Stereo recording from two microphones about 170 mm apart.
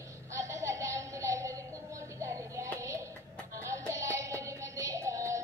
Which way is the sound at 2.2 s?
15° right (ahead or behind).